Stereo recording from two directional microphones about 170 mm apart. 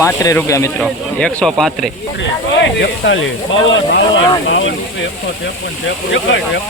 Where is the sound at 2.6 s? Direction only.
90° left.